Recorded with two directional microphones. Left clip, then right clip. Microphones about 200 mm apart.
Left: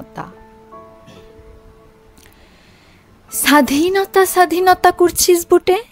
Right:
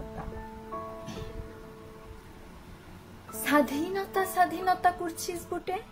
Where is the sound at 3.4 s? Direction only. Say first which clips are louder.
Left 14 dB; 60° left (ahead or behind).